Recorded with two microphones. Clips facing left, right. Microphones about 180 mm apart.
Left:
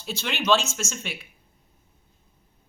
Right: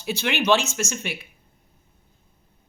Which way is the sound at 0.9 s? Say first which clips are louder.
Right 4 dB; 5° right (ahead or behind).